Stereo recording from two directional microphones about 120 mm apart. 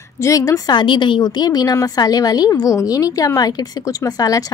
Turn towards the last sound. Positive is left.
turn(degrees=30)  # may be behind; listen again after turning